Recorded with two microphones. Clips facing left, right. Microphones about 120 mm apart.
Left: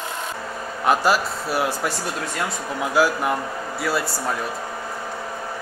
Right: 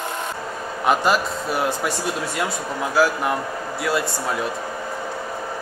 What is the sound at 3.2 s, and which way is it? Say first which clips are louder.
Speech: even; centre (ahead or behind).